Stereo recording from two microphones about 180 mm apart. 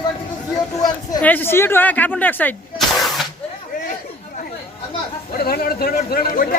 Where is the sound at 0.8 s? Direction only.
20° left (ahead or behind).